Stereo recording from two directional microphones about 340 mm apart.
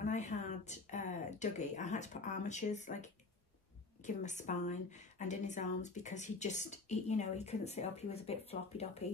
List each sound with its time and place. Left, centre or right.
0.0 s a woman's voice: left